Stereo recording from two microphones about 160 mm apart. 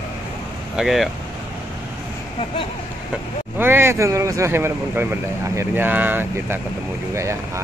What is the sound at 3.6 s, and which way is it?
Speech, 15° right (ahead or behind).